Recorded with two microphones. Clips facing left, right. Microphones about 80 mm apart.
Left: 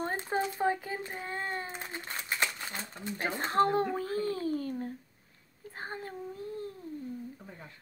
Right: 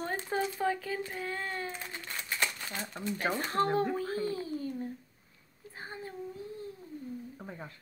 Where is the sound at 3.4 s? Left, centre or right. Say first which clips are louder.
Left 6 dB; left.